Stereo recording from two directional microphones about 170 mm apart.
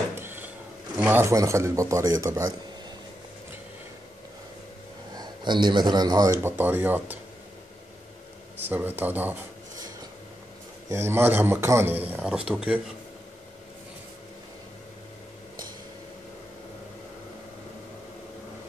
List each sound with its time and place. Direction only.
0.1 s a sound: 10° right (ahead or behind)
0.9 s a man's voice: 10° right (ahead or behind)
5.1 s a man's voice: 25° right (ahead or behind)
6.4 s a man's voice: 10° right (ahead or behind)
8.5 s a man's voice: 10° right (ahead or behind)
10.9 s a man's voice: 15° right (ahead or behind)